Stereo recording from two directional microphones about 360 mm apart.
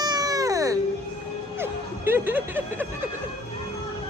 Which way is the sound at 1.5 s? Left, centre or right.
Centre.